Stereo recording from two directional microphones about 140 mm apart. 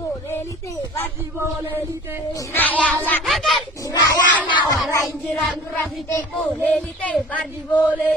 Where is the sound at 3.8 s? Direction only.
25° left (ahead or behind).